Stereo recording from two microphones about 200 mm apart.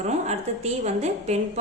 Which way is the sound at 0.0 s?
35° right (ahead or behind).